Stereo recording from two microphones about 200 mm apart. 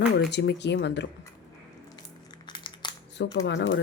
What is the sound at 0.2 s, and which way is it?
Speech, 60° left (ahead or behind).